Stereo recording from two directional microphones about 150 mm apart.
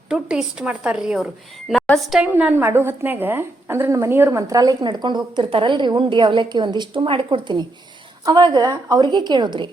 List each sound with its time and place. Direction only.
0.1 s a woman's voice: 5° right (ahead or behind); by 9.6 s 30° right (ahead or behind)